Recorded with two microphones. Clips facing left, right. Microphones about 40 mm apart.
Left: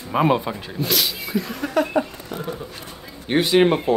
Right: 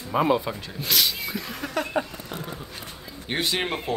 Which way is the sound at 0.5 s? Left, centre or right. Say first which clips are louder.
Left 3 dB; centre.